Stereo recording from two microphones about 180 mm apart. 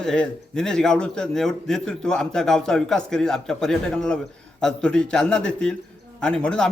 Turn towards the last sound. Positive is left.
turn(degrees=5)  # may be behind; listen again after turning